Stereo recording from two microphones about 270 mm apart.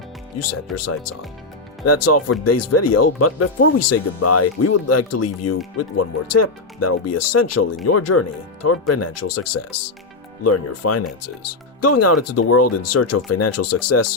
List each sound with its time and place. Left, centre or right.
0.3 s speech: left